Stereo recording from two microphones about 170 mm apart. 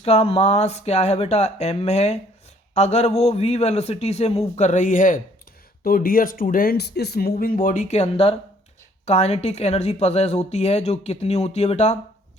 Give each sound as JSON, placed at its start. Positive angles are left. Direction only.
{"t": 0.0, "sound": "speech", "side_deg": 35}